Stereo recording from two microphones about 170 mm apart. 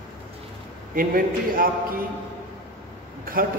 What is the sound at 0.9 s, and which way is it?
A man's voice, 55° right (ahead or behind).